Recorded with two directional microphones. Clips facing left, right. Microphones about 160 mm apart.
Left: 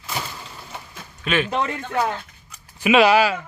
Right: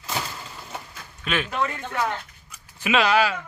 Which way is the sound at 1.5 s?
30° left (ahead or behind).